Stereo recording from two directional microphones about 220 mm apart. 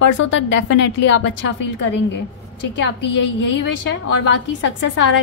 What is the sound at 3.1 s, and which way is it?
A woman's voice, 55° left (ahead or behind).